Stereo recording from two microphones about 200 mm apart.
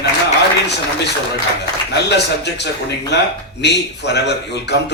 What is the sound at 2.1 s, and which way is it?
A man's voice, 60° left (ahead or behind).